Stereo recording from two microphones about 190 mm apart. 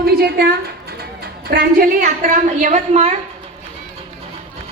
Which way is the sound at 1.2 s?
55° right (ahead or behind).